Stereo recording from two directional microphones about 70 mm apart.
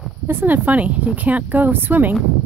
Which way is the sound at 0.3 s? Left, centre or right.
Right.